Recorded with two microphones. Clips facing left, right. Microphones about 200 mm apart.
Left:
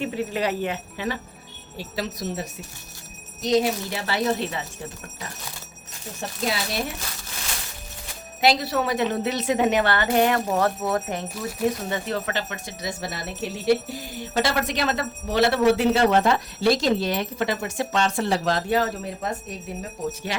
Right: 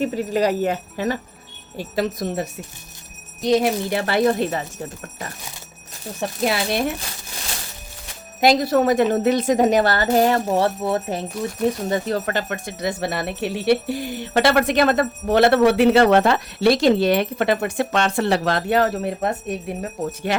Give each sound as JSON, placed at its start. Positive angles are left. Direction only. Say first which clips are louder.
{"t": 0.0, "sound": "a woman's voice", "louder": "right 5 dB", "side_deg": -40}
{"t": 6.1, "sound": "a woman's voice", "louder": "right 6 dB", "side_deg": -60}
{"t": 8.4, "sound": "a woman's voice", "louder": "right 5 dB", "side_deg": -45}